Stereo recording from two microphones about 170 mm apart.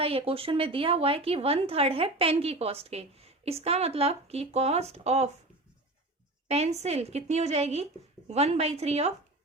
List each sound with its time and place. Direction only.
0.0 s a woman's voice: 35° right (ahead or behind)
6.5 s a woman's voice: 40° right (ahead or behind)